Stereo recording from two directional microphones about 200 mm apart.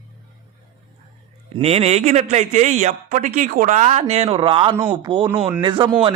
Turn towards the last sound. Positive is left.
turn(degrees=-25)  # may be behind; listen again after turning